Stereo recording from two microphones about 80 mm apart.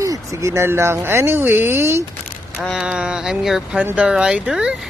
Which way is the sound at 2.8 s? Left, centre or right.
Centre.